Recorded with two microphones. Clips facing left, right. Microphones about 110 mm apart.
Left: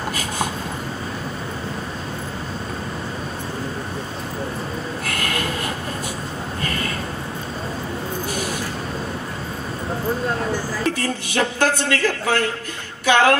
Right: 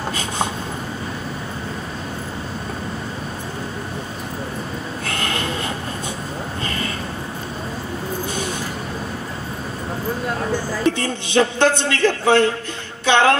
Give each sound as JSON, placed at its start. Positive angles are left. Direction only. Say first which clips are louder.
{"t": 5.0, "sound": "train", "louder": "right 2 dB", "side_deg": -25}
{"t": 10.9, "sound": "a man's voice", "louder": "right 5 dB", "side_deg": -25}
{"t": 13.0, "sound": "music", "louder": "even", "side_deg": -25}